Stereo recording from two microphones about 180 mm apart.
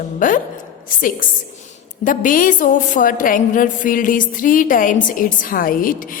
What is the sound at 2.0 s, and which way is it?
A woman's voice, 50° left (ahead or behind).